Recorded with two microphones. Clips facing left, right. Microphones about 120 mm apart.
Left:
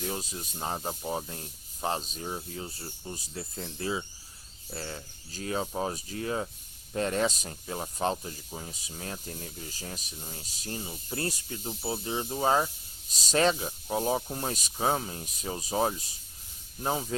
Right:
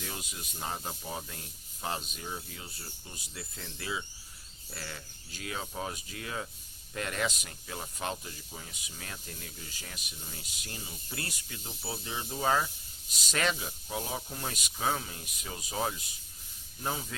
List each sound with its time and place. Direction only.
0.0 s speech: 35° left (ahead or behind)